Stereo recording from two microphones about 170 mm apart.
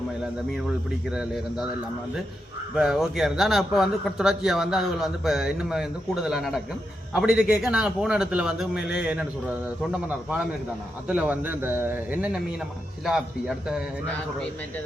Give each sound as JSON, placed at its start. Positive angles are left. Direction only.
{"t": 1.1, "sound": "a man's voice", "side_deg": -5}
{"t": 2.7, "sound": "a man's voice", "side_deg": 0}
{"t": 11.1, "sound": "a man's voice", "side_deg": -10}